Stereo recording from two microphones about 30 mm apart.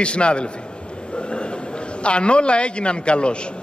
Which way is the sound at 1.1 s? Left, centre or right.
Left.